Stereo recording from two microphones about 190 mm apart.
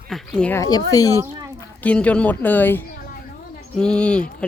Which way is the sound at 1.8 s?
5° left (ahead or behind).